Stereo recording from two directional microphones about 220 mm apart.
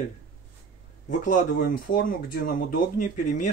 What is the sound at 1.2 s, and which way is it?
Speech, 40° left (ahead or behind).